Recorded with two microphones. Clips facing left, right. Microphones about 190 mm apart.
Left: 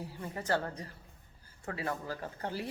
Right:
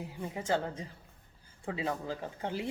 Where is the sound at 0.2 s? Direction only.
15° right (ahead or behind).